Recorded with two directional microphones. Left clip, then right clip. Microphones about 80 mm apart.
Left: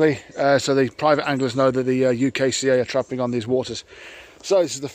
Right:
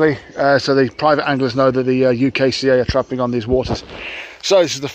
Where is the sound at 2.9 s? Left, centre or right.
Left.